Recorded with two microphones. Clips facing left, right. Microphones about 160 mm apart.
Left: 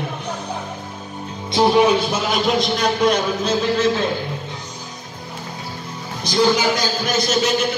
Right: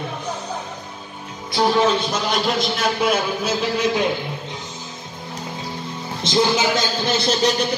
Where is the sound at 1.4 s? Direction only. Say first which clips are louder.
Left 3 dB; 20° left (ahead or behind).